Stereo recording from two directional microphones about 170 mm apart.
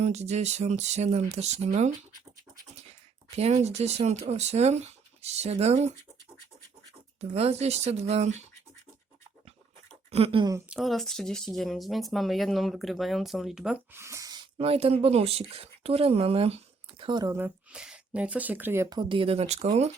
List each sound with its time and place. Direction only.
0.0 s speech: 40° right (ahead or behind)
3.3 s speech: 40° right (ahead or behind)
7.2 s speech: 35° right (ahead or behind)
10.1 s speech: 35° right (ahead or behind)
10.7 s speech: centre (ahead or behind); by 14.4 s 20° right (ahead or behind)
14.6 s speech: 35° right (ahead or behind)
17.0 s speech: 25° right (ahead or behind)
17.3 s speech: 10° right (ahead or behind); by 19.9 s 40° right (ahead or behind)